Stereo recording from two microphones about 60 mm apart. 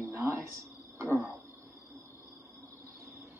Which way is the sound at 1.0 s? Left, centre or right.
Right.